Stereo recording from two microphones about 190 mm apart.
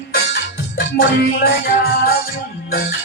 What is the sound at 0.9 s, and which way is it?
Music, 50° left (ahead or behind).